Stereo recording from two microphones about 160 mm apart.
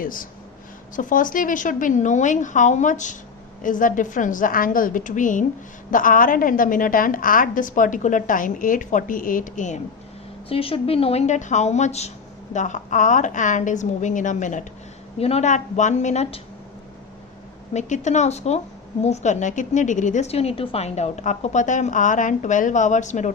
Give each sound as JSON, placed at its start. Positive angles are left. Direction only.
{"t": 0.0, "sound": "a woman's voice", "side_deg": 60}
{"t": 10.5, "sound": "a woman's voice", "side_deg": 35}
{"t": 17.7, "sound": "a woman's voice", "side_deg": 50}